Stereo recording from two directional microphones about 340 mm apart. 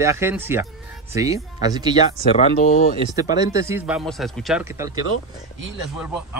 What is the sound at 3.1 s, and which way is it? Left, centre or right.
Speech, centre.